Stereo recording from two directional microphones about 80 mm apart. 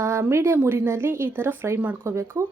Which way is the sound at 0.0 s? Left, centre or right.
Right.